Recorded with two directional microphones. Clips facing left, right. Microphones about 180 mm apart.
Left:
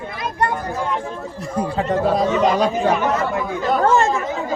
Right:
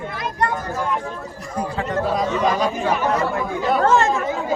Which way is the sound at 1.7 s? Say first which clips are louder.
Left 4 dB; 35° left (ahead or behind).